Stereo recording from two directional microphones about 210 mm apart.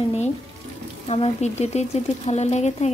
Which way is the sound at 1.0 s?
30° left (ahead or behind).